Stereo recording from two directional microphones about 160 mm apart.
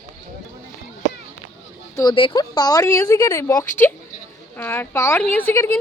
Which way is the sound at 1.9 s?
25° left (ahead or behind).